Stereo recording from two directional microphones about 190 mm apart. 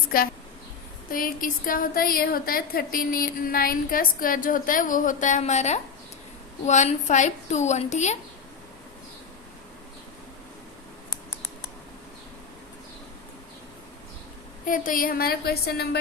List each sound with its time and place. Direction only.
0.1 s a woman's voice: 50° left (ahead or behind)
14.6 s a woman's voice: 45° left (ahead or behind)